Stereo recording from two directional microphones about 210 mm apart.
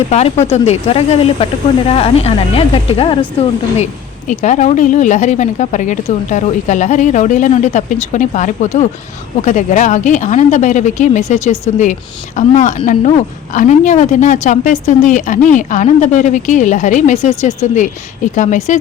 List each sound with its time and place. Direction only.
0.1 s speech: 30° left (ahead or behind)
4.3 s speech: 35° left (ahead or behind)